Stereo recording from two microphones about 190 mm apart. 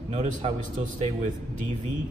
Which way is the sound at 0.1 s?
35° right (ahead or behind).